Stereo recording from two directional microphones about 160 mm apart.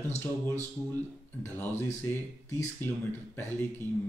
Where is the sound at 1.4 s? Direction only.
15° left (ahead or behind).